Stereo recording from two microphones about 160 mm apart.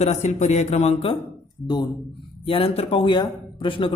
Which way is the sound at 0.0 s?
45° left (ahead or behind).